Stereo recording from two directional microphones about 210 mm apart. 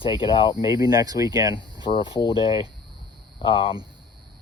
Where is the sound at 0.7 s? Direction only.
15° right (ahead or behind).